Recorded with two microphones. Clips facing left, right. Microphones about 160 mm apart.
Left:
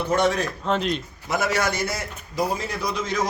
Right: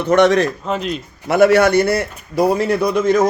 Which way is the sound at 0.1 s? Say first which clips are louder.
Right 10 dB; 75° right (ahead or behind).